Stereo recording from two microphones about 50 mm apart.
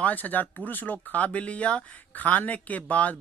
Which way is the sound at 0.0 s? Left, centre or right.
Left.